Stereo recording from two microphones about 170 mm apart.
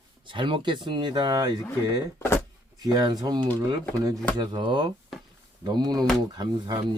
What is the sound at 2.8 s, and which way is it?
Speech, 25° right (ahead or behind).